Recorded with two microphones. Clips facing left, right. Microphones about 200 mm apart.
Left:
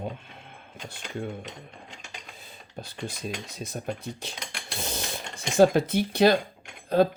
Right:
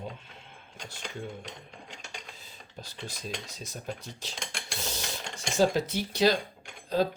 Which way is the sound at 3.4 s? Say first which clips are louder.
Left 5 dB; 55° left (ahead or behind).